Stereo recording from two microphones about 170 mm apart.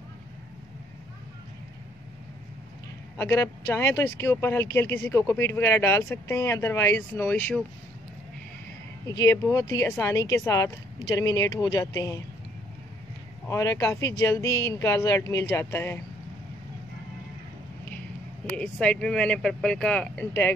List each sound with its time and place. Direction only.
3.2 s speech: 15° left (ahead or behind)
9.0 s speech: 20° left (ahead or behind)
13.5 s speech: 15° left (ahead or behind)
18.6 s speech: 5° left (ahead or behind)